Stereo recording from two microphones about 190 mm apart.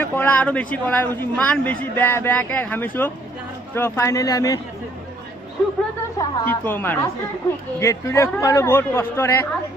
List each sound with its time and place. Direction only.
0.0 s speech: 10° left (ahead or behind)
6.1 s speech: 10° left (ahead or behind)